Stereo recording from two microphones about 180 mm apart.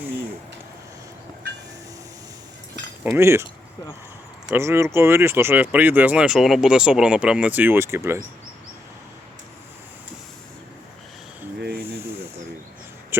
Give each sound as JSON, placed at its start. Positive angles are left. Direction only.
{"t": 3.0, "sound": "speech", "side_deg": -15}
{"t": 4.4, "sound": "speech", "side_deg": -15}
{"t": 11.6, "sound": "snake", "side_deg": -55}